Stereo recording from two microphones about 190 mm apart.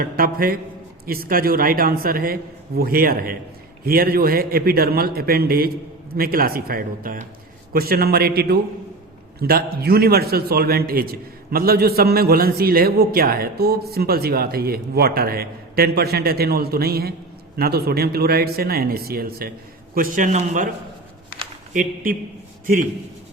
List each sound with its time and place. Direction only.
0.0 s a man's voice: 50° right (ahead or behind)
21.7 s a man's voice: 45° right (ahead or behind)